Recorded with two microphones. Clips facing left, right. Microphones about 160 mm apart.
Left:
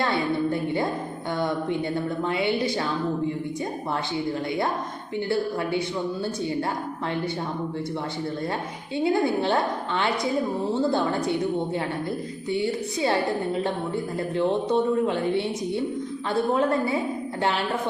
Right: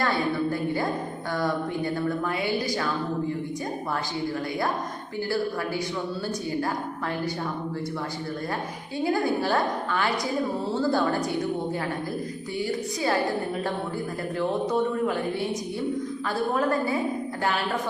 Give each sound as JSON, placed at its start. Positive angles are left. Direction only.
{"t": 0.0, "sound": "speech", "side_deg": 25}
{"t": 9.0, "sound": "speech", "side_deg": 25}
{"t": 12.5, "sound": "speech", "side_deg": 25}
{"t": 14.3, "sound": "speech", "side_deg": 25}